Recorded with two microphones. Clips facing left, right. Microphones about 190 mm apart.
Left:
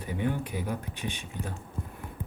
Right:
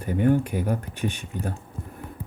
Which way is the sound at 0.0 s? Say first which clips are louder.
Right 9 dB; 50° right (ahead or behind).